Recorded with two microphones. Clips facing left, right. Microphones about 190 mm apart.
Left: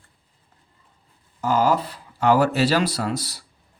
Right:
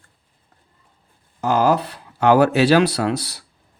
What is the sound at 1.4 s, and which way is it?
Speech, 70° right (ahead or behind).